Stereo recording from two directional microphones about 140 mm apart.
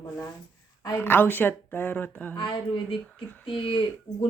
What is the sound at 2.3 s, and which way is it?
Speech, 35° left (ahead or behind).